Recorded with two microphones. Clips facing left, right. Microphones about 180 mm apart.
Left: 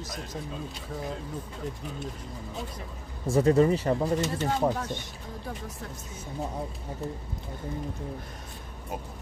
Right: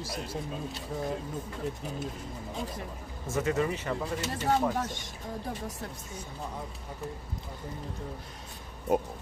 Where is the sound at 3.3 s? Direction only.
35° left (ahead or behind).